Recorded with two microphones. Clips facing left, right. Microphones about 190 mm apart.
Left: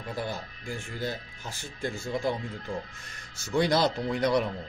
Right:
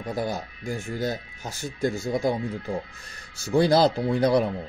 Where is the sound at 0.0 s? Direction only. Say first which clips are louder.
Right 5 dB; 40° right (ahead or behind).